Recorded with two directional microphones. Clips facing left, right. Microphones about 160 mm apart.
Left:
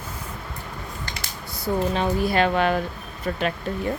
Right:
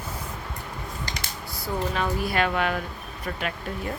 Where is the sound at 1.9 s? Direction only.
25° left (ahead or behind).